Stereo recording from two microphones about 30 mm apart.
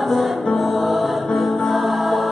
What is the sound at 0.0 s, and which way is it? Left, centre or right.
Music, centre.